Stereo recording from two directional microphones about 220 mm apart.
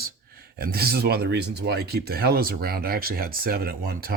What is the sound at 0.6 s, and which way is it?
Speech, 45° right (ahead or behind).